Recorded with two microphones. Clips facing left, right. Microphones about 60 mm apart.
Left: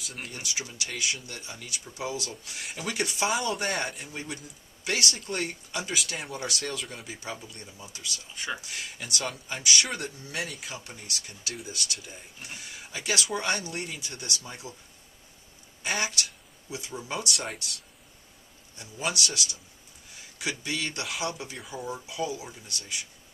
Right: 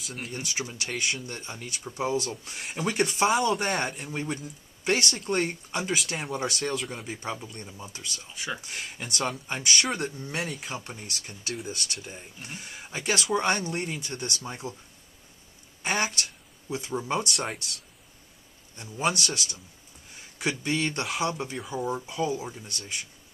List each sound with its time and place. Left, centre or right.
0.0 s speech: centre
0.3 s speech: right
3.3 s speech: centre
4.0 s speech: right
5.9 s speech: centre
7.1 s speech: right
9.8 s speech: centre
10.6 s speech: right
15.8 s speech: right
17.4 s speech: centre
18.8 s speech: right
21.1 s speech: centre
21.8 s speech: right